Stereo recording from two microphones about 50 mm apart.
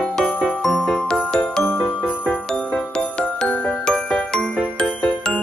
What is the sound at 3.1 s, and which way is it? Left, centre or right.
Jingle, centre.